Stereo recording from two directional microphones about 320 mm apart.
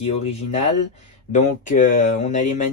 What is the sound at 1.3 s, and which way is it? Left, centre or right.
Speech, left.